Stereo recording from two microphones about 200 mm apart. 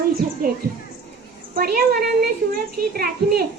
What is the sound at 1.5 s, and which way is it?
A child's voice, 45° right (ahead or behind).